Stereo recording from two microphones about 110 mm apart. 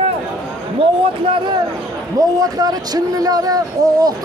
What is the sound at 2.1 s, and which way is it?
Speech, 35° right (ahead or behind).